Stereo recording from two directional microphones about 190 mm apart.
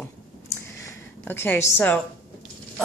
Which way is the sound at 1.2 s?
10° left (ahead or behind).